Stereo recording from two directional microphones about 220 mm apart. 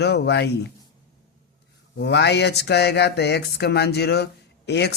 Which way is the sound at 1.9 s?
50° left (ahead or behind).